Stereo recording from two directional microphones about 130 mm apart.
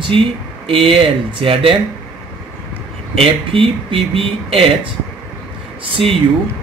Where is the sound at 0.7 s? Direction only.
45° right (ahead or behind).